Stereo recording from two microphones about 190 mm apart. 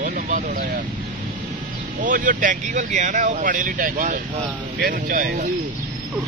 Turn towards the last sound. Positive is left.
turn(degrees=-45)  # may be behind; listen again after turning